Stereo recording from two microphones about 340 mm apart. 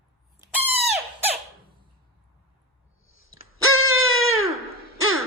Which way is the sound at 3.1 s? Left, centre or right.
Left.